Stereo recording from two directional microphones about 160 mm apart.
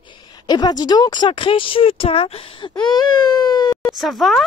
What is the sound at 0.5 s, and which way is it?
Speech, 25° left (ahead or behind).